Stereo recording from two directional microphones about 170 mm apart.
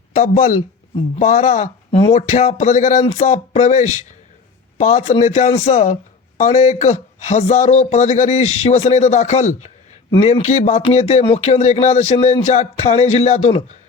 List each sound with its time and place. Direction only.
0.1 s a man's voice: 45° left (ahead or behind)